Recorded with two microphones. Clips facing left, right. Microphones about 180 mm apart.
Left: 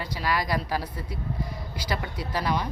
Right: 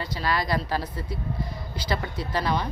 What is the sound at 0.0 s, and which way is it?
Speech, 10° left (ahead or behind).